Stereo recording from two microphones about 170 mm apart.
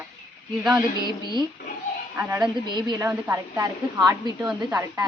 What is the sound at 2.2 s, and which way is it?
Speech, 15° right (ahead or behind).